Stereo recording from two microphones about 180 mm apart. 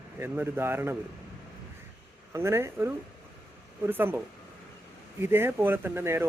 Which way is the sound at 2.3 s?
15° right (ahead or behind).